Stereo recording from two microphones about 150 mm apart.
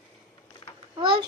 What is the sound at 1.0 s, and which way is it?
Speech, 35° right (ahead or behind).